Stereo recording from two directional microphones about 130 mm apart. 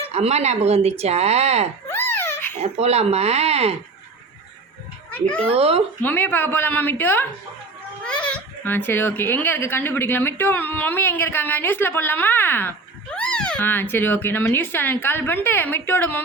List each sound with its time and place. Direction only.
0.1 s speech: 55° right (ahead or behind)
1.9 s baby laughter: 15° left (ahead or behind)
2.6 s speech: 55° right (ahead or behind)
5.5 s speech: 50° right (ahead or behind)
6.0 s speech: 15° left (ahead or behind)